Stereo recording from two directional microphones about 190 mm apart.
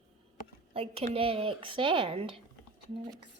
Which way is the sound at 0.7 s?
30° right (ahead or behind).